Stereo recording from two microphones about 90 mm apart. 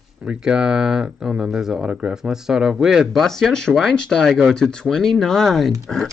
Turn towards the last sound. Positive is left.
turn(degrees=5)  # may be behind; listen again after turning